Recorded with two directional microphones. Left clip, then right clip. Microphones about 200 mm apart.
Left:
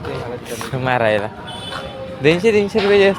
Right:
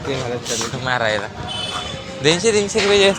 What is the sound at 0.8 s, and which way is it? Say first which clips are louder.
Speech: left 4 dB; 45° left (ahead or behind).